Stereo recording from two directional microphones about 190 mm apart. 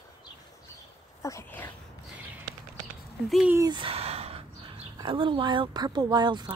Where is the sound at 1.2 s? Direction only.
15° left (ahead or behind).